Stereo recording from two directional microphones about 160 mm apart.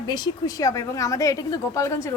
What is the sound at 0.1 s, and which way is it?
A woman's voice, 25° left (ahead or behind).